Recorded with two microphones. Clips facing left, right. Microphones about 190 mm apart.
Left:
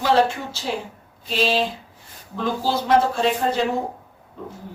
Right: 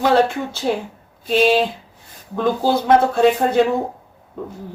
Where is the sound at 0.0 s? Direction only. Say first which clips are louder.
Right 3 dB; 55° right (ahead or behind).